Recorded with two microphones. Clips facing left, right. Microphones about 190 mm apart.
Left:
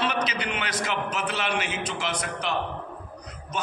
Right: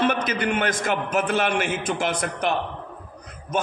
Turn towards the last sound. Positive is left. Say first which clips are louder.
# right 6 dB
turn(degrees=-50)  # may be behind; listen again after turning